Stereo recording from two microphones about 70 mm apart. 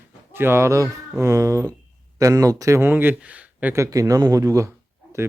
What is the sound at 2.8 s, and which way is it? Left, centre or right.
Speech, right.